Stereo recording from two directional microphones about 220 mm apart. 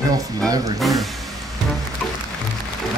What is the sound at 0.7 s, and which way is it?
Speech, centre (ahead or behind).